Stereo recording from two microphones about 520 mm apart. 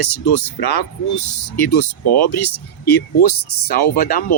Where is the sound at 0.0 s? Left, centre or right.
Left.